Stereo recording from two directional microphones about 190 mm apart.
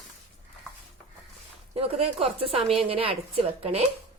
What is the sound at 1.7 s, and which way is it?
Speech, 30° right (ahead or behind).